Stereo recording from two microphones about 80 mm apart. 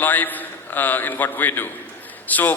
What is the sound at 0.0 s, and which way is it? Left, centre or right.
A man's voice, left.